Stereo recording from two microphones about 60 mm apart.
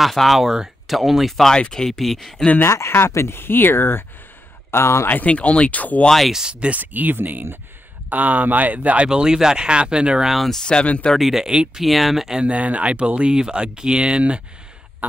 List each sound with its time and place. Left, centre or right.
0.0 s speech: centre
2.6 s speech: left
5.1 s speech: left
6.0 s speech: centre
6.3 s speech: centre
6.7 s speech: right
10.3 s speech: centre
10.6 s speech: centre
11.1 s speech: centre
11.5 s speech: centre
11.8 s speech: centre